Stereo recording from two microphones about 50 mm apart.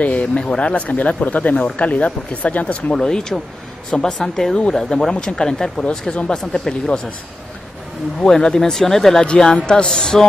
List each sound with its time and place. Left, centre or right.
0.0 s speech: left
2.9 s speech: centre
8.2 s speech: centre
9.2 s speech: centre